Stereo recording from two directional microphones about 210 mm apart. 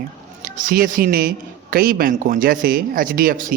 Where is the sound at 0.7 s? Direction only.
45° right (ahead or behind).